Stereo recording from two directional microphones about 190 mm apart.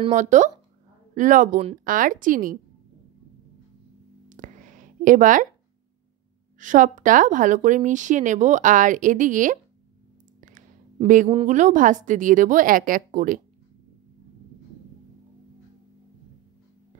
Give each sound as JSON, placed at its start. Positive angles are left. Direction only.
{"t": 0.1, "sound": "a woman's voice", "side_deg": -40}
{"t": 4.3, "sound": "a sound", "side_deg": -40}
{"t": 6.6, "sound": "a woman's voice", "side_deg": -45}
{"t": 11.4, "sound": "a woman's voice", "side_deg": -40}